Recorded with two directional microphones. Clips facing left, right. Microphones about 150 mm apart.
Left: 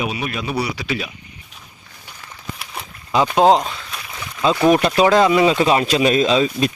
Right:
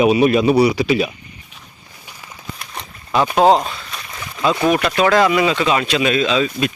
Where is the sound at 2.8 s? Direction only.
5° left (ahead or behind).